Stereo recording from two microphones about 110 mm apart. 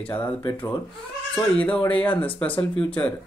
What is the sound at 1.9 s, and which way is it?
Speech, 15° left (ahead or behind).